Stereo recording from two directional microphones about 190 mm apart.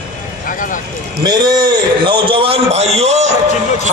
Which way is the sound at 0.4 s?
45° left (ahead or behind).